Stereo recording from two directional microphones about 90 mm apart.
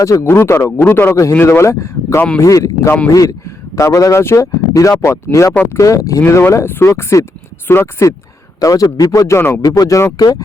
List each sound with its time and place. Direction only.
0.0 s speech: 35° left (ahead or behind)
8.6 s speech: 40° left (ahead or behind)